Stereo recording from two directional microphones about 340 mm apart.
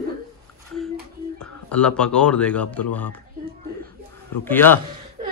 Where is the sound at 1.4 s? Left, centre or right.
Centre.